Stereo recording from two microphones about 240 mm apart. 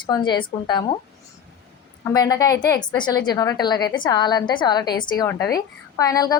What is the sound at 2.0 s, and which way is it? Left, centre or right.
A woman's voice, centre.